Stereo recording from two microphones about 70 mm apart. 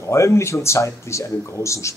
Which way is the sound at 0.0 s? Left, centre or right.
Left.